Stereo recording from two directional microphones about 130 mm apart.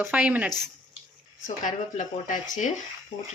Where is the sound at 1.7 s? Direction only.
75° left (ahead or behind).